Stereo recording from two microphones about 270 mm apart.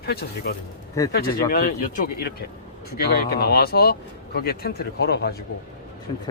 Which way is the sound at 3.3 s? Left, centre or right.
Left.